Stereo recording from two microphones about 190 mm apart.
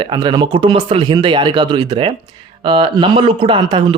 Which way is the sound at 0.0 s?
25° right (ahead or behind).